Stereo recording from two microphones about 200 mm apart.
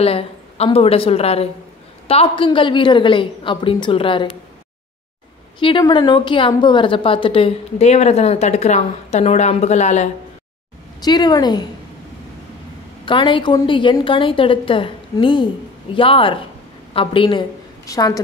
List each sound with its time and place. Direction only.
0.0 s a woman's voice: 30° left (ahead or behind)
5.6 s a woman's voice: 25° left (ahead or behind)
11.0 s a woman's voice: 20° left (ahead or behind)
13.0 s a woman's voice: 25° left (ahead or behind)